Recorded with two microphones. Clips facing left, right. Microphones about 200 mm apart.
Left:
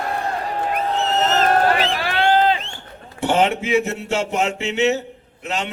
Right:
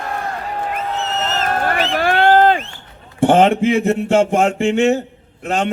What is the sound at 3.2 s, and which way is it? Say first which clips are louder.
Speech: right 7 dB; 50° right (ahead or behind).